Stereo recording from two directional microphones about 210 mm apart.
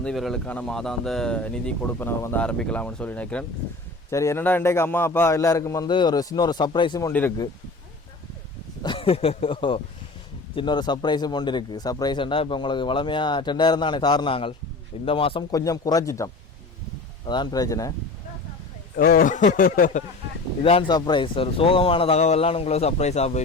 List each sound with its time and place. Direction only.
0.0 s a man's voice: centre (ahead or behind); by 7.1 s 20° left (ahead or behind)
7.1 s a man's voice: 10° left (ahead or behind)
8.8 s a man's voice: 25° left (ahead or behind)
18.9 s speech: 45° left (ahead or behind)
20.6 s speech: 25° left (ahead or behind)